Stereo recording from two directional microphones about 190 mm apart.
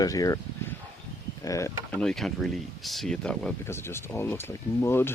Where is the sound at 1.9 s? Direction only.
Centre (ahead or behind).